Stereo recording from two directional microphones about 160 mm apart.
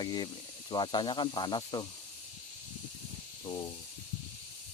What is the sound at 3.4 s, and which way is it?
Speech, 25° left (ahead or behind).